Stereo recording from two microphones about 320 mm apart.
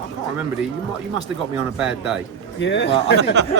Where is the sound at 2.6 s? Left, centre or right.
Left.